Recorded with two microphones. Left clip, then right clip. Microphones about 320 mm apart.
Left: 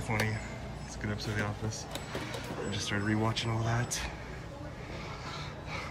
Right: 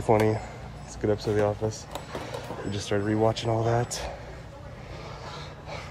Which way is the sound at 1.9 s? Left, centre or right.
Centre.